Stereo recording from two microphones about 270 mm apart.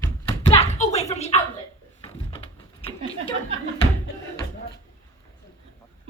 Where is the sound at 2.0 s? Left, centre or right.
Left.